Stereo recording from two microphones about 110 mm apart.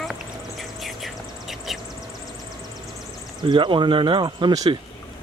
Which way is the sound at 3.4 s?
45° right (ahead or behind).